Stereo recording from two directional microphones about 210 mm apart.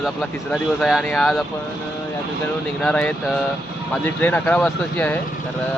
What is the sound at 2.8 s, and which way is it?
Speech, 5° left (ahead or behind).